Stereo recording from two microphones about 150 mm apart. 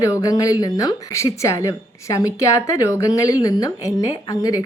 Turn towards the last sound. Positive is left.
turn(degrees=25)  # may be behind; listen again after turning